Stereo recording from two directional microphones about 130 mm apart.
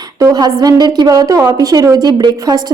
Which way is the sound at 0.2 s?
30° right (ahead or behind).